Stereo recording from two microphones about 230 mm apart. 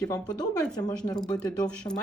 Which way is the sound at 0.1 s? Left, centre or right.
Centre.